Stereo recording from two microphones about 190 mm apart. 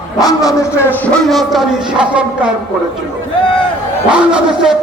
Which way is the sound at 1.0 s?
5° left (ahead or behind).